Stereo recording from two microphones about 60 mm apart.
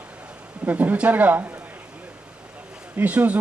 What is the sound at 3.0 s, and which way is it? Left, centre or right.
Speech, right.